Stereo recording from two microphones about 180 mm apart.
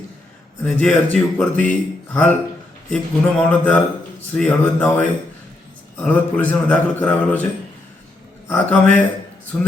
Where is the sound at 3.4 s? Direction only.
10° left (ahead or behind).